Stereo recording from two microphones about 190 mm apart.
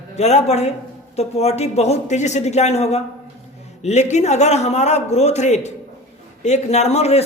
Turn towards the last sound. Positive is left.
turn(degrees=35)  # may be behind; listen again after turning